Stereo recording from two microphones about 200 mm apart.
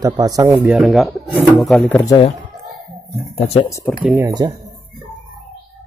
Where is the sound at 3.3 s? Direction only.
30° left (ahead or behind).